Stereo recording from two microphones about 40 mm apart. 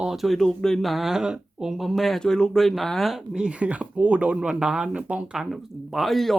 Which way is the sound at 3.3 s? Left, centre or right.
Right.